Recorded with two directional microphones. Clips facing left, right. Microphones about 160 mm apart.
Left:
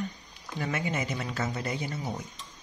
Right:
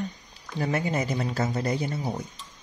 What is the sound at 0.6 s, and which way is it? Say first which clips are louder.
Speech: right 5 dB; 35° right (ahead or behind).